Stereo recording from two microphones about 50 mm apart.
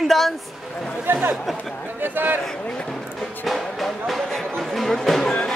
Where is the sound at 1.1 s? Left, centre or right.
Right.